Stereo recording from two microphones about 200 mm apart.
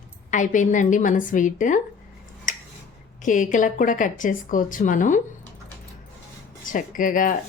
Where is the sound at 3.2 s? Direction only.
40° left (ahead or behind).